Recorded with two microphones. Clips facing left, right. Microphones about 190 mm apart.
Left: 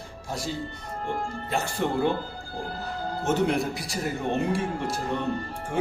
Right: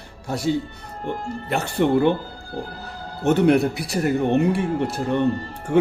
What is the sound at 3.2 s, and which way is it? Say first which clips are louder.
Speech: right 8 dB; 65° right (ahead or behind).